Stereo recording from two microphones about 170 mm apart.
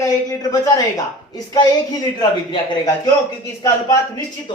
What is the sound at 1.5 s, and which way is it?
Speech, 25° left (ahead or behind).